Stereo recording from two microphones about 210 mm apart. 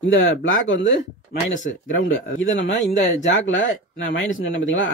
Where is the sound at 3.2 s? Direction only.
60° left (ahead or behind).